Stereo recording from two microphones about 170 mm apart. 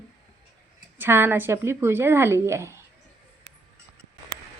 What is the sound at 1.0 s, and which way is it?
A woman's voice, 15° right (ahead or behind).